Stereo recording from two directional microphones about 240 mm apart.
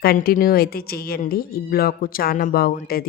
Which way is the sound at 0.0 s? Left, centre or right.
Left.